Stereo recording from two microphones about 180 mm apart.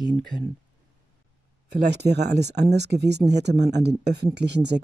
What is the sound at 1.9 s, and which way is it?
Speech, 70° right (ahead or behind).